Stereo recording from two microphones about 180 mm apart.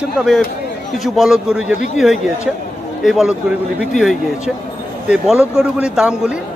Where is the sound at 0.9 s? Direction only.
Centre (ahead or behind).